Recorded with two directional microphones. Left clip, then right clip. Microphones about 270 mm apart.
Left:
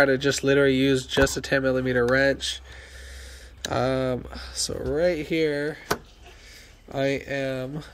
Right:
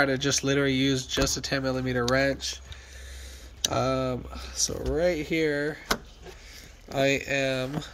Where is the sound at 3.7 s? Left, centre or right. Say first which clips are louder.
Left 4 dB; centre.